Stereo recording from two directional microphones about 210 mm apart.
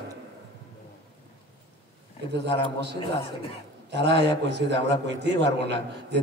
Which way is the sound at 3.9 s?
55° right (ahead or behind).